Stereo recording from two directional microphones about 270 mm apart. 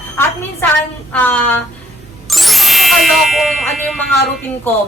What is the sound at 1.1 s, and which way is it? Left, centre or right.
A woman's voice, centre.